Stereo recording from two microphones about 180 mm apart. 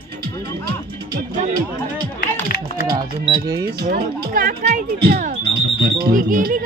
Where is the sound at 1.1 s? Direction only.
50° right (ahead or behind).